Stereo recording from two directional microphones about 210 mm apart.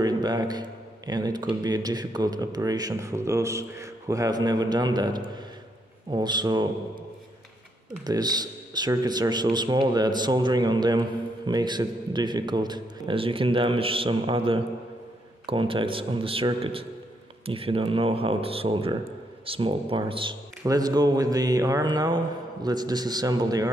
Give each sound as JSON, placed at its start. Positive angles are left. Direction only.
{"t": 0.0, "sound": "a man's voice", "side_deg": -20}
{"t": 8.0, "sound": "speech", "side_deg": -20}